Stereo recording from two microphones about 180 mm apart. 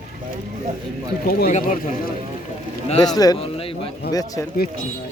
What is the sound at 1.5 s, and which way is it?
Speech, 45° left (ahead or behind).